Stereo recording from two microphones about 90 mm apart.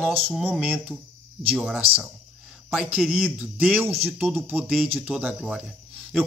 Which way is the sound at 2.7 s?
10° right (ahead or behind).